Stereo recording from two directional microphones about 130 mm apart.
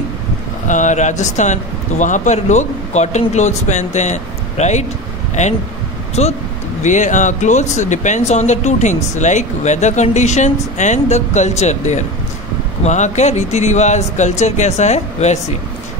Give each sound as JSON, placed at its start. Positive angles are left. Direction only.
{"t": 0.7, "sound": "speech", "side_deg": 70}
{"t": 6.8, "sound": "speech", "side_deg": 70}